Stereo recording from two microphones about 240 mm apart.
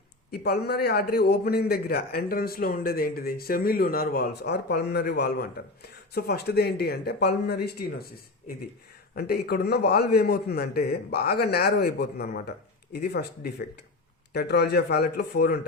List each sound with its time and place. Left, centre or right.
0.3 s a man's voice: left
9.1 s a man's voice: left